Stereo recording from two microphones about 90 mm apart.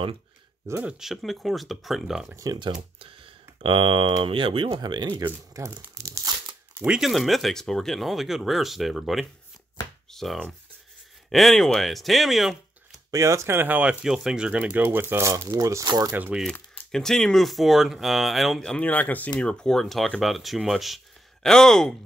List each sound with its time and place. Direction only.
0.8 s speech: 5° right (ahead or behind)
2.3 s speech: 40° right (ahead or behind)
3.0 s a sound: 75° right (ahead or behind)
4.2 s speech: 90° right
4.6 s speech: 55° right (ahead or behind)
5.5 s crumpling: 35° right (ahead or behind)
6.8 s speech: 5° right (ahead or behind)
13.1 s speech: 35° right (ahead or behind); by 13.9 s 20° right (ahead or behind)
14.0 s speech: 10° right (ahead or behind); by 16.1 s 45° right (ahead or behind)
16.1 s speech: 15° right (ahead or behind)
16.9 s speech: 5° left (ahead or behind)
18.9 s speech: 15° left (ahead or behind)